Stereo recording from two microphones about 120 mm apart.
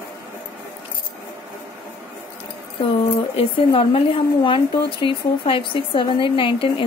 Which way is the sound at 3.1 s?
50° left (ahead or behind).